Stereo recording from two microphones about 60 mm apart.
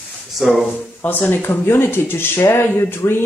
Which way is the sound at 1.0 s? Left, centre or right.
Left.